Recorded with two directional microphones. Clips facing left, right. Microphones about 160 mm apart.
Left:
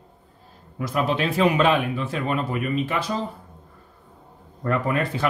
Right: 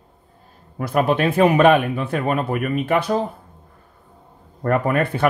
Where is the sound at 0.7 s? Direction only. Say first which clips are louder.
Right 5 dB; 55° right (ahead or behind).